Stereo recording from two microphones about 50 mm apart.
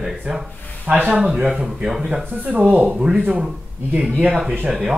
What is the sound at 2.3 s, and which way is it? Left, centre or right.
Speech, right.